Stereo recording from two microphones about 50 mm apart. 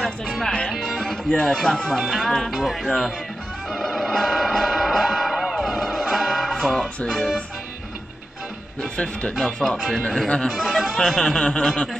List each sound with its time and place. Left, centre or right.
0.0 s music: centre
0.9 s speech: centre
3.7 s music: centre
7.1 s speech: centre
8.9 s speech: left
9.3 s speech: centre